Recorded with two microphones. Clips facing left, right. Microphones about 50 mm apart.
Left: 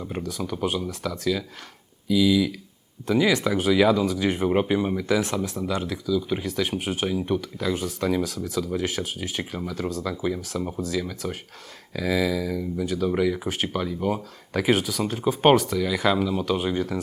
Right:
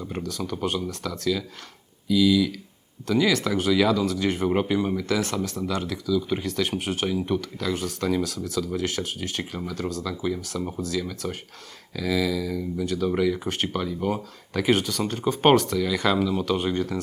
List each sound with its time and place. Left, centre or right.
0.0 s speech: centre
11.9 s a sound: left
12.5 s speech: centre